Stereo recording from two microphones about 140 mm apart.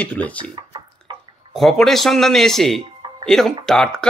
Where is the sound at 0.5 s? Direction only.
35° right (ahead or behind).